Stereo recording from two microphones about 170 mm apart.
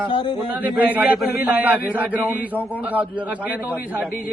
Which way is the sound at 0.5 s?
10° right (ahead or behind).